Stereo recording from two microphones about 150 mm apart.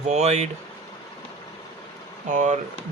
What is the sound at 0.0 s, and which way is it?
Speech, 45° right (ahead or behind).